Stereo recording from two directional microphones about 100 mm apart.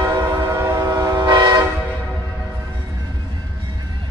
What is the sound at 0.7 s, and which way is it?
Train, 40° right (ahead or behind).